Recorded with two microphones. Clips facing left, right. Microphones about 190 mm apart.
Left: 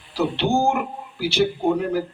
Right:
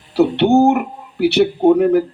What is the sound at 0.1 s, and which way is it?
A man's voice, 65° right (ahead or behind).